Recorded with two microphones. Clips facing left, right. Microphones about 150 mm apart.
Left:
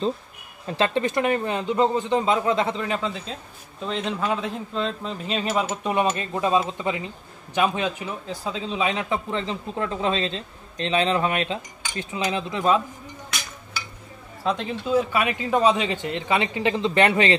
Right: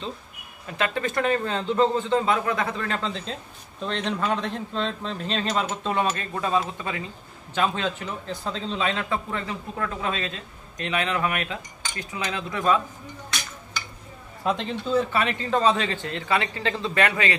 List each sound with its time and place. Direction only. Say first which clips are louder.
0.7 s a man's voice: left 4 dB; 30° left (ahead or behind)
14.4 s speech: even; centre (ahead or behind); by 17.4 s 25° left (ahead or behind)